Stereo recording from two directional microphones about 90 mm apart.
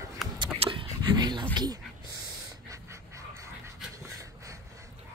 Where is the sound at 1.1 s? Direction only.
55° right (ahead or behind).